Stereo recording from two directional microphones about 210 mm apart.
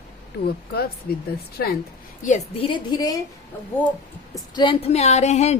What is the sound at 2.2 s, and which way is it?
Speech, 30° left (ahead or behind).